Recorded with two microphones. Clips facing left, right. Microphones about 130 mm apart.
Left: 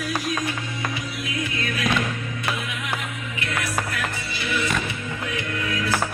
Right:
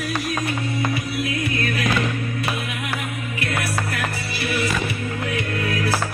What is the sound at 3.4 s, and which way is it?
Music, 65° right (ahead or behind).